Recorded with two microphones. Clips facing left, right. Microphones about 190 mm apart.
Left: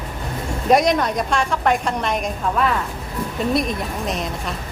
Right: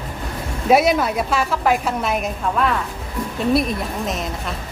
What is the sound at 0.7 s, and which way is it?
Speech, 5° right (ahead or behind).